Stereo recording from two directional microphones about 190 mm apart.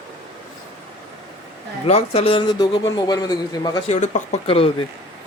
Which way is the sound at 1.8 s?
35° left (ahead or behind).